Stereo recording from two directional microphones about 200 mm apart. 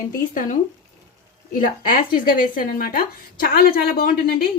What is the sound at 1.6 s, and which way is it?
A woman's voice, 45° left (ahead or behind).